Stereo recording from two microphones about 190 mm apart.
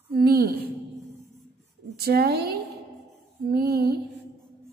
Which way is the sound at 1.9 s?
55° right (ahead or behind).